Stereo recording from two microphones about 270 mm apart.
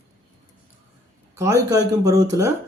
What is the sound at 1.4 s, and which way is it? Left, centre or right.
Speech, centre.